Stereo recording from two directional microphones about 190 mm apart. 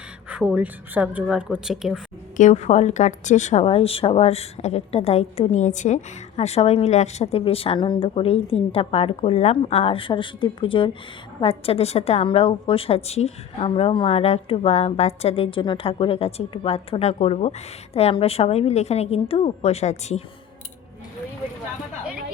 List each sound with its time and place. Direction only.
0.3 s a woman's voice: 5° right (ahead or behind)
2.4 s a woman's voice: 40° left (ahead or behind)